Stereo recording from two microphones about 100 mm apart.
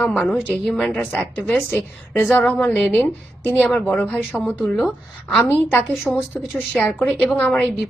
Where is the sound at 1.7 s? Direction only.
15° left (ahead or behind).